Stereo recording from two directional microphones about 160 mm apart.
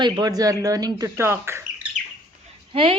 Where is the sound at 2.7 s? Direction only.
35° right (ahead or behind).